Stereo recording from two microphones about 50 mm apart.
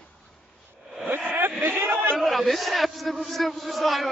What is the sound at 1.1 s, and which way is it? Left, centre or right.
Vehicle, right.